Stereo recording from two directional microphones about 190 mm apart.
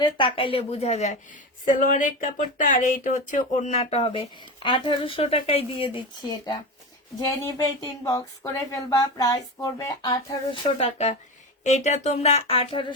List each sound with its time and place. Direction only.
0.0 s speech: 25° left (ahead or behind)
10.8 s speech: 35° left (ahead or behind)